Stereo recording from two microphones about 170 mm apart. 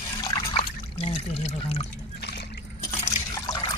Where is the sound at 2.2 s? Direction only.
80° left.